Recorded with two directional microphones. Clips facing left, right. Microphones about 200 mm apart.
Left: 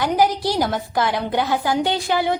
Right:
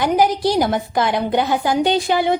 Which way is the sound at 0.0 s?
15° right (ahead or behind).